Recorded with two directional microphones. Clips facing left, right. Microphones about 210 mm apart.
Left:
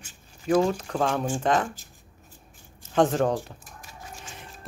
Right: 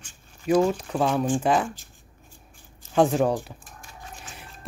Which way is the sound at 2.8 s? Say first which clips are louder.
Right 1 dB; 10° right (ahead or behind).